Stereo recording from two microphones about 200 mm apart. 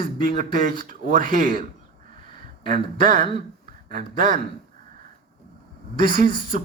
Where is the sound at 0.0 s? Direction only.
45° right (ahead or behind).